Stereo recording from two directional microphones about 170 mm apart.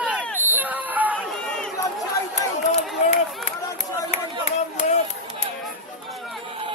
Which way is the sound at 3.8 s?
40° left (ahead or behind).